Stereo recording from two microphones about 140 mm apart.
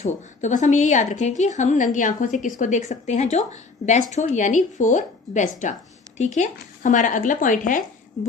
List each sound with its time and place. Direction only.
0.0 s speech: 60° left (ahead or behind)